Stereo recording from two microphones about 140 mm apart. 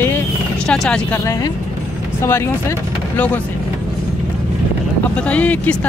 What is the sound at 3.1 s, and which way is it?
Speech, 10° left (ahead or behind).